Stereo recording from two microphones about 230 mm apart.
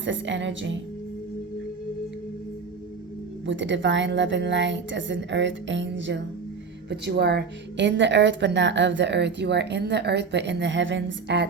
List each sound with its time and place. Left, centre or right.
0.0 s a woman's voice: right
3.4 s a woman's voice: right